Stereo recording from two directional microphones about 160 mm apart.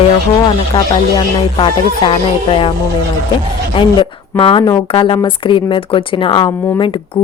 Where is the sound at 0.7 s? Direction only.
25° left (ahead or behind).